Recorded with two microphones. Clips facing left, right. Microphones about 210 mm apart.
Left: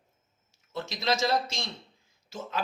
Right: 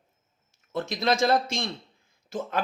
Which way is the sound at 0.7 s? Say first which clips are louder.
Right 4 dB; 55° right (ahead or behind).